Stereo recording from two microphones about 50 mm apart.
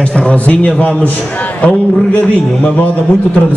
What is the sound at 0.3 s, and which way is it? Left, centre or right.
A man's voice, left.